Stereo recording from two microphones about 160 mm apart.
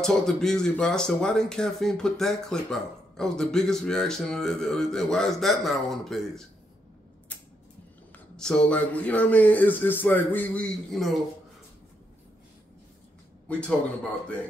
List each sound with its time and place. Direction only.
0.0 s speech: 5° left (ahead or behind)
8.4 s a man's voice: 5° left (ahead or behind)
13.5 s a man's voice: 5° left (ahead or behind)